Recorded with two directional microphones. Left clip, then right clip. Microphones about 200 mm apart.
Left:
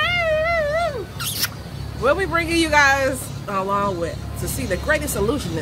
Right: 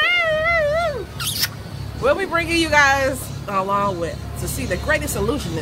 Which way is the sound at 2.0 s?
Centre (ahead or behind).